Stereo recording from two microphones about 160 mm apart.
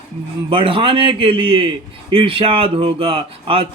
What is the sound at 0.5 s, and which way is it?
A man's voice, 35° right (ahead or behind).